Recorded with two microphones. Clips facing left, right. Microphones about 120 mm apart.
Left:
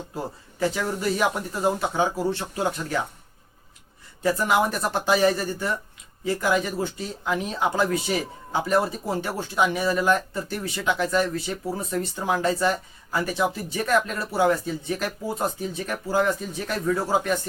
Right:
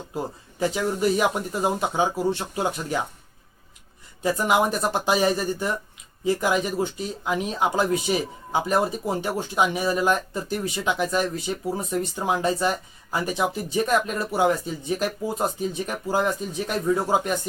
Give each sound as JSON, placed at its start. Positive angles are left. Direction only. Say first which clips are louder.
{"t": 0.6, "sound": "speech", "louder": "right 2 dB", "side_deg": -20}
{"t": 4.2, "sound": "speech", "louder": "even", "side_deg": -20}